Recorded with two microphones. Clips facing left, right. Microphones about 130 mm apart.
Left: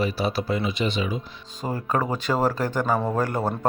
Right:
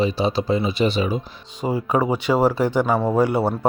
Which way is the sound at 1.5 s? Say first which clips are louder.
Right 5 dB; 15° right (ahead or behind).